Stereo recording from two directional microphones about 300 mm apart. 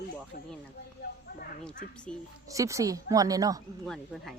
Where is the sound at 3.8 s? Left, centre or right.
Centre.